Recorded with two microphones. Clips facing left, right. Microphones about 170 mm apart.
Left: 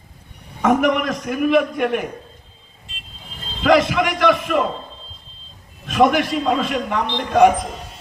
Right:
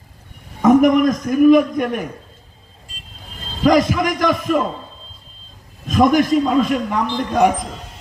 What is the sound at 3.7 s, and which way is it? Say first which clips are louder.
Speech: right 1 dB; 40° right (ahead or behind).